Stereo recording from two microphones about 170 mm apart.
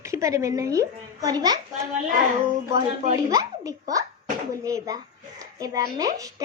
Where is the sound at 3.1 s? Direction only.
20° right (ahead or behind).